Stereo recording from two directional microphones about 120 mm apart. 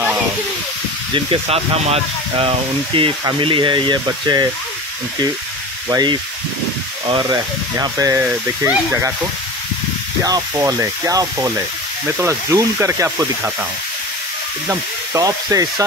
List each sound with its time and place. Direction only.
1.1 s speech: 50° right (ahead or behind); by 4.5 s 35° right (ahead or behind)
7.1 s speech: 35° right (ahead or behind)
8.2 s speech: 15° right (ahead or behind)
10.2 s speech: 30° right (ahead or behind)
14.7 s speech: 30° right (ahead or behind)